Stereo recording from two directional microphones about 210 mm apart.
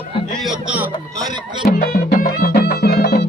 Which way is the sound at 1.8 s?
45° left (ahead or behind).